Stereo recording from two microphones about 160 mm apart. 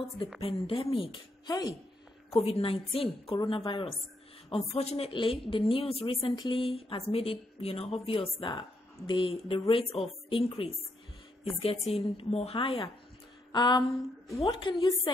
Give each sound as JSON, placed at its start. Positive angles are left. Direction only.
{"t": 0.4, "sound": "a woman's voice", "side_deg": 35}
{"t": 2.3, "sound": "a woman's voice", "side_deg": 35}
{"t": 11.8, "sound": "a woman's voice", "side_deg": 40}
{"t": 13.5, "sound": "a sound", "side_deg": 30}
{"t": 14.4, "sound": "a woman's voice", "side_deg": 30}